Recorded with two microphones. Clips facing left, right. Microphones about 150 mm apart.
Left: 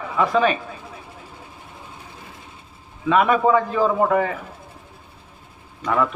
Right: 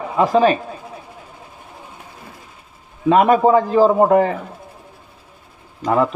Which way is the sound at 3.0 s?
40° right (ahead or behind).